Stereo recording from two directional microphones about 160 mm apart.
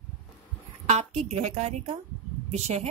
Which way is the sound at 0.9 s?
45° right (ahead or behind).